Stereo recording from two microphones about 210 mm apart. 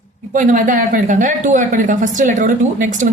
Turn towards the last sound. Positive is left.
turn(degrees=-35)  # may be behind; listen again after turning